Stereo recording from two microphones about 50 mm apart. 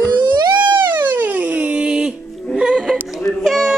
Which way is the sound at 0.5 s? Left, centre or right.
Right.